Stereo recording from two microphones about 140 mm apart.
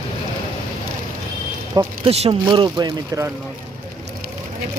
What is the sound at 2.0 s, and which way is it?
Speech, 50° right (ahead or behind).